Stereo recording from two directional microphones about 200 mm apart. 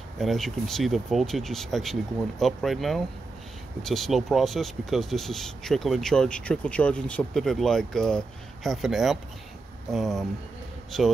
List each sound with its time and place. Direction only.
0.2 s speech: centre (ahead or behind)